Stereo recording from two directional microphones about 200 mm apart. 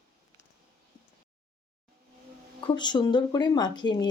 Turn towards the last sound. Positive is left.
turn(degrees=20)  # may be behind; listen again after turning